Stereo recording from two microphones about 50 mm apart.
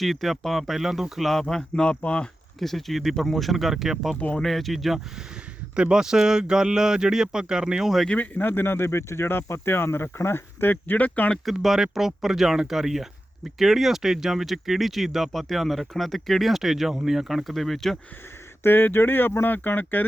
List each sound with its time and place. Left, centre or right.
0.0 s speech: centre
1.3 s speech: centre
2.0 s speech: left
2.6 s speech: centre
5.7 s speech: centre
8.4 s speech: left
10.9 s speech: left
11.4 s speech: centre
18.6 s speech: left
19.5 s speech: left